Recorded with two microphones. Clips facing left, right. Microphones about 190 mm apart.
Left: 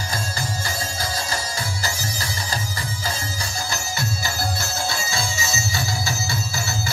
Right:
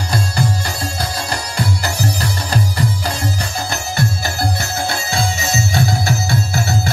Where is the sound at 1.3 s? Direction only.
70° right (ahead or behind).